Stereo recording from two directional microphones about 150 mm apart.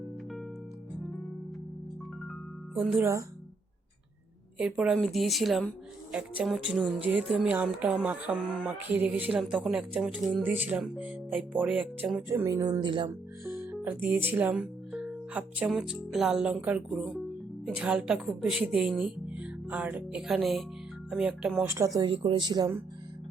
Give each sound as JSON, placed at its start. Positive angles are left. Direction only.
{"t": 2.9, "sound": "speech", "side_deg": -20}
{"t": 4.5, "sound": "speech", "side_deg": -5}
{"t": 12.3, "sound": "speech", "side_deg": -20}
{"t": 13.4, "sound": "speech", "side_deg": -15}
{"t": 21.7, "sound": "speech", "side_deg": -20}
{"t": 22.1, "sound": "speech", "side_deg": -35}